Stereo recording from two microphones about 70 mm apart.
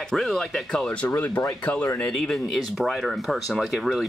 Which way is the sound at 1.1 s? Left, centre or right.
Left.